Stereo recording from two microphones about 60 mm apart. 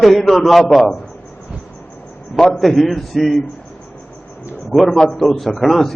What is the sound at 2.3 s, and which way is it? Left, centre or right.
A man's voice, centre.